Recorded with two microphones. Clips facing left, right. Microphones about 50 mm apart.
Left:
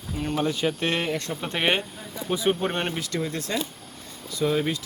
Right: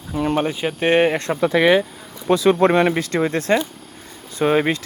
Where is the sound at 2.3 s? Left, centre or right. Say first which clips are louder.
Right 10 dB; right.